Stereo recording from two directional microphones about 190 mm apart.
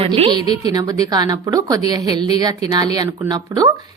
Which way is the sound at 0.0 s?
25° right (ahead or behind).